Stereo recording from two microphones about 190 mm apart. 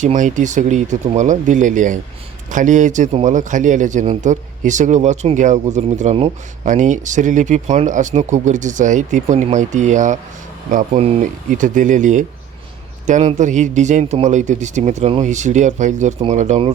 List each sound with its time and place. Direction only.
0.0 s a man's voice: 40° right (ahead or behind)